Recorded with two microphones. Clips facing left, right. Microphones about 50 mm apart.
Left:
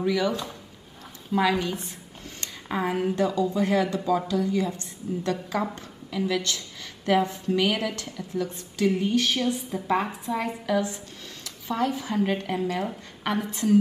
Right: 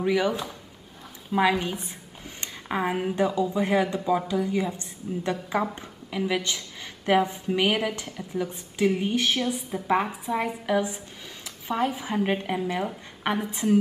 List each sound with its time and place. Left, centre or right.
0.0 s a woman's voice: right
1.6 s a woman's voice: centre